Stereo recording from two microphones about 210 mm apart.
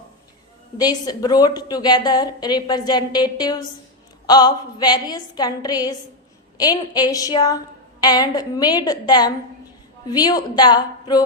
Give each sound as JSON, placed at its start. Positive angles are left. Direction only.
{"t": 0.8, "sound": "a woman's voice", "side_deg": 20}